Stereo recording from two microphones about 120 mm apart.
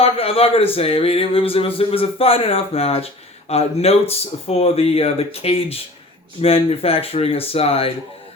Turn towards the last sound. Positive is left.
turn(degrees=55)  # may be behind; listen again after turning